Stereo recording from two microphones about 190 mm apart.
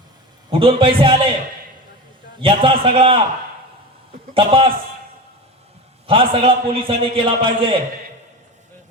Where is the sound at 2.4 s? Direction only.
25° right (ahead or behind).